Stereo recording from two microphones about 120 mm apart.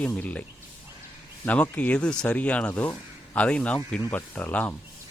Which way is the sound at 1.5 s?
10° left (ahead or behind).